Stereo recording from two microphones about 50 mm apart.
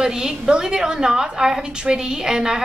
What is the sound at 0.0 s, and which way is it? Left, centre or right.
A woman's voice, centre.